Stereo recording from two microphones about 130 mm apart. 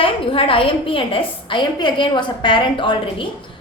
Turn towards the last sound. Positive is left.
turn(degrees=40)  # may be behind; listen again after turning